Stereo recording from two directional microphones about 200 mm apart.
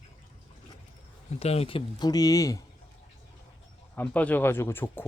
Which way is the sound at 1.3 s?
30° left (ahead or behind).